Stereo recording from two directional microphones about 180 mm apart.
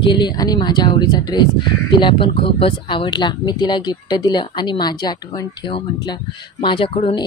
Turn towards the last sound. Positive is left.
turn(degrees=30)  # may be behind; listen again after turning